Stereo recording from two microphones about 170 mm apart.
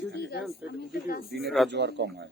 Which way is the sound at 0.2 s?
80° left.